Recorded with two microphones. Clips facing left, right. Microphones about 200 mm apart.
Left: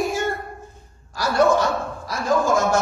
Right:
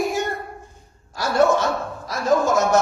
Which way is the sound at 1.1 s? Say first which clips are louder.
Even; 25° right (ahead or behind).